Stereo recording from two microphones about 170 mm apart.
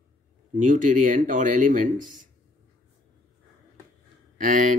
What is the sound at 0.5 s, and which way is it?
Speech, 50° right (ahead or behind).